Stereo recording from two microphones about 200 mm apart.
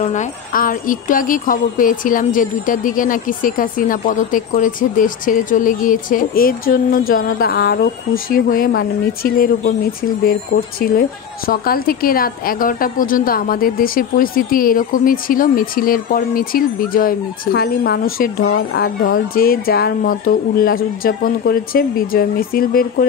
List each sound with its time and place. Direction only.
0.0 s speech: 35° left (ahead or behind)